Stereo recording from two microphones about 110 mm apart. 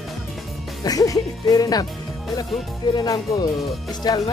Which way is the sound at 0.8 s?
35° left (ahead or behind).